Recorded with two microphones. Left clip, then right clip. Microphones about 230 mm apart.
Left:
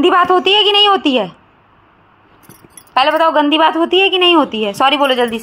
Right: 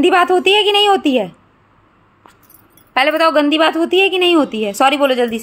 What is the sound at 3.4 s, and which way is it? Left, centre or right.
A woman's voice, centre.